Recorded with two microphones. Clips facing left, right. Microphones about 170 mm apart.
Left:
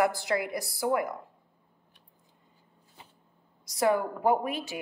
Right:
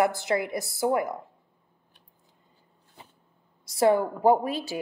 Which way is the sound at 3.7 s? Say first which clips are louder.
Right 4 dB; 30° right (ahead or behind).